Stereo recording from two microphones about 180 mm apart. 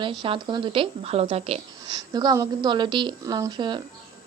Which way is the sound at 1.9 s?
20° right (ahead or behind).